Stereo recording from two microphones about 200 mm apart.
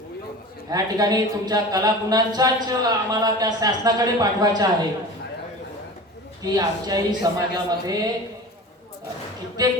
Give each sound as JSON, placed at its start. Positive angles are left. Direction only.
{"t": 0.7, "sound": "speech", "side_deg": -20}
{"t": 6.4, "sound": "speech", "side_deg": -20}